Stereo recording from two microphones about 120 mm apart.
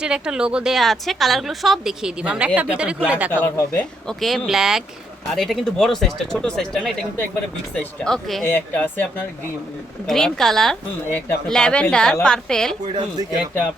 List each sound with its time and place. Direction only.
0.0 s a woman's voice: 5° right (ahead or behind)
3.4 s speech: 10° left (ahead or behind)
4.2 s a woman's voice: centre (ahead or behind)
8.4 s speech: 15° left (ahead or behind)
10.1 s a woman's voice: 5° left (ahead or behind)